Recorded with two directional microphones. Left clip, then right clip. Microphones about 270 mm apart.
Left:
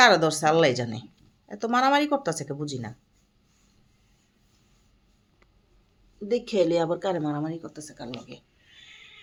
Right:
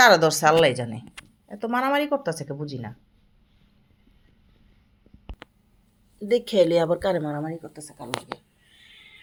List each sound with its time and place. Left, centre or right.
0.0 s speech: centre
6.1 s a woman's voice: centre